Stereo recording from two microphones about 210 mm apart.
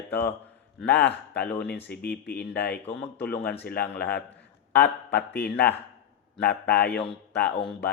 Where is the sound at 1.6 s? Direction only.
50° left (ahead or behind).